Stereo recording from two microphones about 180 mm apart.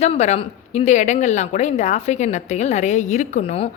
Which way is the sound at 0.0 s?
40° left (ahead or behind).